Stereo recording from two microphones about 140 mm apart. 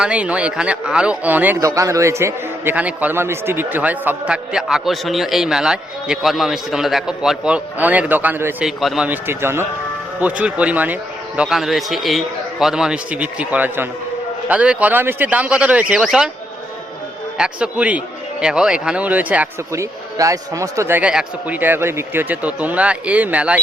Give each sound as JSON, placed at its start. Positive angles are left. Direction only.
{"t": 0.0, "sound": "a man's voice", "side_deg": -10}
{"t": 1.6, "sound": "a man's voice", "side_deg": -25}
{"t": 8.6, "sound": "a man's voice", "side_deg": 0}
{"t": 9.0, "sound": "a man's voice", "side_deg": -15}
{"t": 17.3, "sound": "a man's voice", "side_deg": -5}
{"t": 19.7, "sound": "a man's voice", "side_deg": -20}